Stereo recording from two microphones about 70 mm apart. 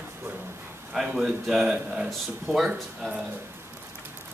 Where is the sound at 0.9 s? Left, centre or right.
Centre.